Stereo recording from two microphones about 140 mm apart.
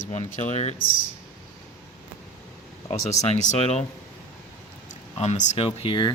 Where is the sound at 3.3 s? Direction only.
50° left (ahead or behind).